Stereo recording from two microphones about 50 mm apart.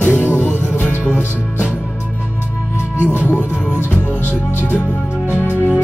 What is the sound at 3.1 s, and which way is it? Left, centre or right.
Speech, left.